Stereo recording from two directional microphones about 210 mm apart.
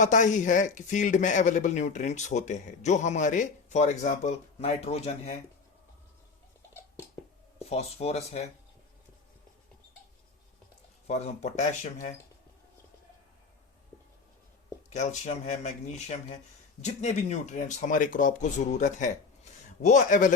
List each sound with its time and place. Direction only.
0.0 s speech: 35° left (ahead or behind)
7.6 s speech: 30° left (ahead or behind)
11.0 s speech: 30° left (ahead or behind)
14.8 s speech: 35° left (ahead or behind)